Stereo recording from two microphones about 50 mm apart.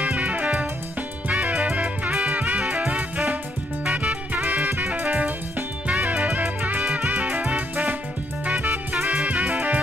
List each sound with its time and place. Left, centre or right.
0.0 s music: right
2.3 s music: right
3.9 s music: right
6.2 s music: right
6.8 s music: centre
7.3 s music: right